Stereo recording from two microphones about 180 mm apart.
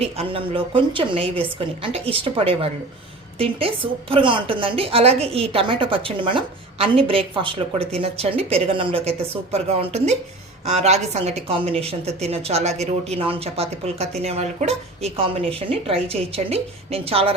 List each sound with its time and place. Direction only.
0.0 s a woman's voice: 30° right (ahead or behind)